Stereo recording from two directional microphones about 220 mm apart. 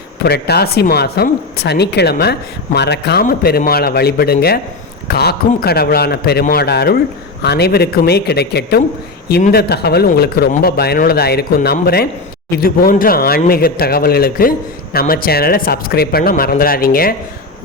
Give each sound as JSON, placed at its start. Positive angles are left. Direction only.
{"t": 0.2, "sound": "speech", "side_deg": 45}